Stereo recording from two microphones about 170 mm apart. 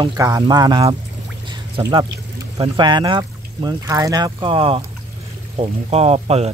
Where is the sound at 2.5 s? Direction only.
25° right (ahead or behind).